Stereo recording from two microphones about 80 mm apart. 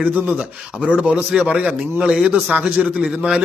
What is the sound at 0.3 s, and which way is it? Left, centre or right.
Speech, centre.